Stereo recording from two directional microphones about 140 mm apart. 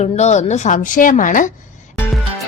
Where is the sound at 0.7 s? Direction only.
75° left (ahead or behind).